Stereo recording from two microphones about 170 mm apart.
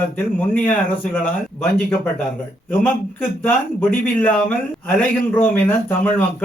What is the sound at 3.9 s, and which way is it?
A man's voice, 10° left (ahead or behind).